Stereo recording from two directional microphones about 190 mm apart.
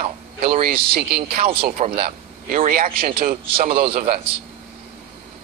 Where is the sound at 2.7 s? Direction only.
45° right (ahead or behind).